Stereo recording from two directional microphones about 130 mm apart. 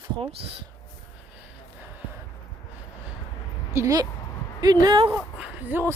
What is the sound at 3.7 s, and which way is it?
Speech, 25° right (ahead or behind).